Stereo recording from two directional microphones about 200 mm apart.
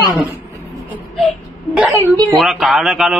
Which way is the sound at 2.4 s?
Centre (ahead or behind).